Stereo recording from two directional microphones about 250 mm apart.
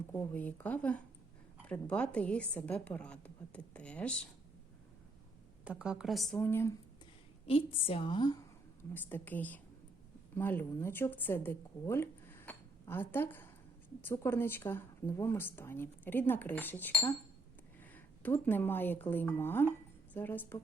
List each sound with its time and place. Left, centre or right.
0.1 s a woman's voice: centre
5.6 s a woman's voice: centre
7.4 s a woman's voice: left